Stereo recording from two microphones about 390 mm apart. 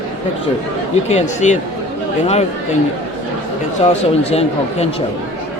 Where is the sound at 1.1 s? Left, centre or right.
Centre.